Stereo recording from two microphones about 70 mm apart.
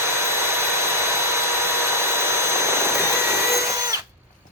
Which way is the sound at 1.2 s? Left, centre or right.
Right.